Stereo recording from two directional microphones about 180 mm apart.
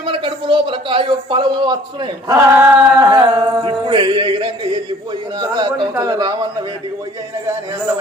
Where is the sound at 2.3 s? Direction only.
15° right (ahead or behind).